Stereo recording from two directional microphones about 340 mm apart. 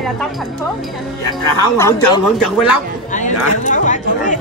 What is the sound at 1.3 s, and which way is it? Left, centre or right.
A man's voice, centre.